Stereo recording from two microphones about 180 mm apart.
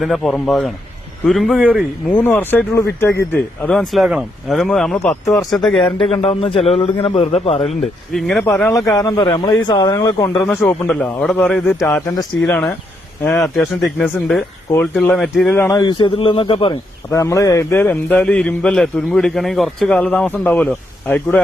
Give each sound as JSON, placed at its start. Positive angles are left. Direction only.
{"t": 0.0, "sound": "a man's voice", "side_deg": 0}
{"t": 5.8, "sound": "a man's voice", "side_deg": 30}
{"t": 7.7, "sound": "speech", "side_deg": 0}
{"t": 8.7, "sound": "a man's voice", "side_deg": 20}
{"t": 17.1, "sound": "a man's voice", "side_deg": 15}